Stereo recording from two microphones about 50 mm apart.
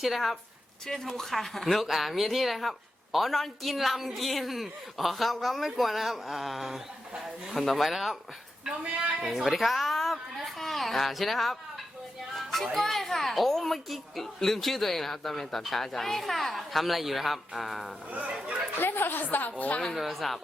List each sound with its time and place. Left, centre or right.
0.0 s speech: centre
0.9 s speech: centre
9.2 s a child's voice: centre
18.1 s speech: right
18.8 s a woman's voice: left
20.0 s speech: centre